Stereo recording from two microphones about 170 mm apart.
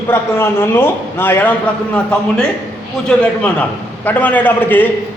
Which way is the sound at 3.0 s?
10° left (ahead or behind).